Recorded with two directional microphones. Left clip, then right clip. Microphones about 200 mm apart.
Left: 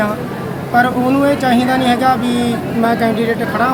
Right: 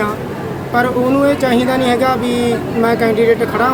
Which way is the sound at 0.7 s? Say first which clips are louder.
Left 1 dB; centre (ahead or behind).